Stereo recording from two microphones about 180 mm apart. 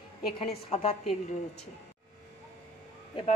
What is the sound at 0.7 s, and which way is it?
Speech, 35° left (ahead or behind).